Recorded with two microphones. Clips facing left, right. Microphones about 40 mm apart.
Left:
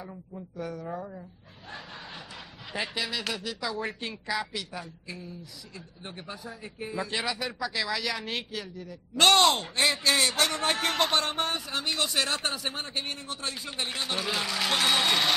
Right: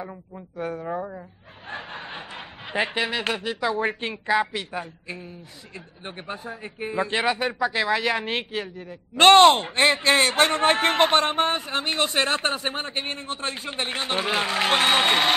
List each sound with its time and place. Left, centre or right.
0.0 s speech: right